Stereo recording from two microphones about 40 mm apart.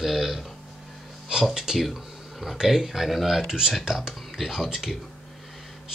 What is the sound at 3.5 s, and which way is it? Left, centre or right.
Speech, centre.